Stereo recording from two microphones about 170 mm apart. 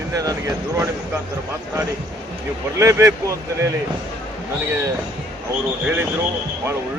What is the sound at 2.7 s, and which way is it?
Speech, 15° right (ahead or behind).